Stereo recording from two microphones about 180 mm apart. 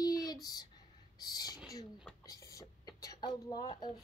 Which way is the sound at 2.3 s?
20° left (ahead or behind).